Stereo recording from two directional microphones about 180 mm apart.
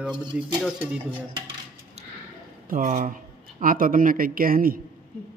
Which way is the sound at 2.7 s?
45° right (ahead or behind).